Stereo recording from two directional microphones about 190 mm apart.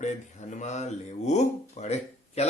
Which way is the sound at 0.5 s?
40° left (ahead or behind).